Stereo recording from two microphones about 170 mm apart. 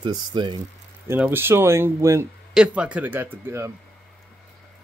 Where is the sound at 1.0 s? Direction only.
15° right (ahead or behind).